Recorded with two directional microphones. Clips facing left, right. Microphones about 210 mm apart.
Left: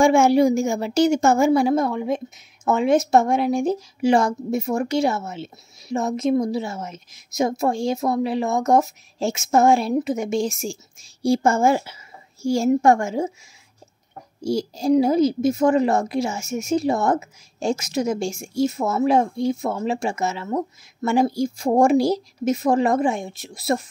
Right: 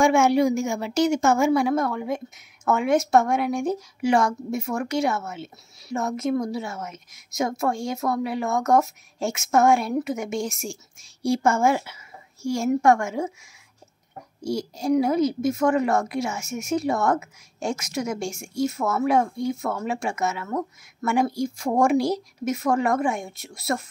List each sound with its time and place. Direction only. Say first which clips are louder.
0.0 s a woman's voice: left 3 dB; 30° left (ahead or behind)
14.5 s a woman's voice: left 4 dB; 30° left (ahead or behind)